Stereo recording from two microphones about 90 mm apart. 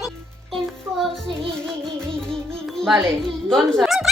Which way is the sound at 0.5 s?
5° left (ahead or behind).